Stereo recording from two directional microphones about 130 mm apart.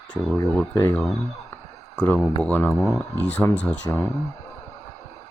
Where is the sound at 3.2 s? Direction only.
15° left (ahead or behind).